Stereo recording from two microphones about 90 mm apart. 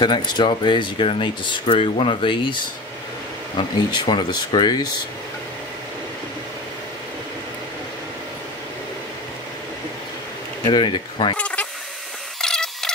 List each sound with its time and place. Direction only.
0.0 s speech: 60° left (ahead or behind)
3.9 s speech: 60° left (ahead or behind)
10.6 s speech: 55° left (ahead or behind)
11.3 s speech: 15° left (ahead or behind)
12.4 s a sound: 5° left (ahead or behind)